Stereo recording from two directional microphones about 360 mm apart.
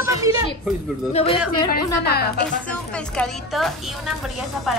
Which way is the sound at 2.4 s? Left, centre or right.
Centre.